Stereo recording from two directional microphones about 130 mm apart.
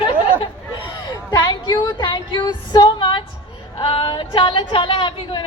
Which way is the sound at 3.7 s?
40° left (ahead or behind).